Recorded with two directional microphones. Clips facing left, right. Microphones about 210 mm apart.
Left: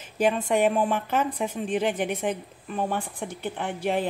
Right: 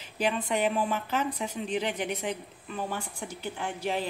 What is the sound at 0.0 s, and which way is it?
A woman's voice, 45° left (ahead or behind).